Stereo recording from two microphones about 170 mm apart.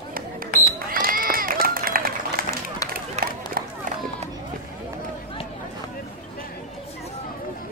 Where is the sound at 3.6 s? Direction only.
60° right (ahead or behind).